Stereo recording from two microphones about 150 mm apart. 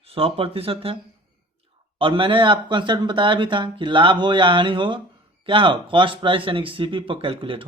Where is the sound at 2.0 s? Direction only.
35° right (ahead or behind).